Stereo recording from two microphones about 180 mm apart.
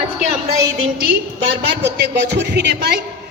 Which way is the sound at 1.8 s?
70° right (ahead or behind).